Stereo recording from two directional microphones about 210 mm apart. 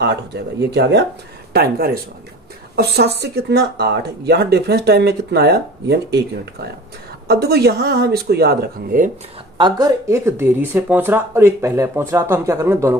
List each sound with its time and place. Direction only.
0.0 s speech: 55° right (ahead or behind)
9.6 s speech: 20° right (ahead or behind)